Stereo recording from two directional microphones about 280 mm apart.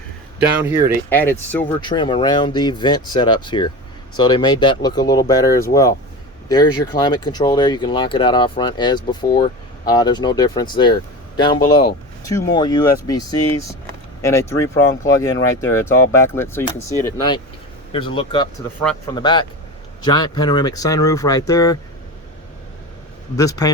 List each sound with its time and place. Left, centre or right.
1.1 s speech: centre
1.8 s speech: centre
23.4 s speech: centre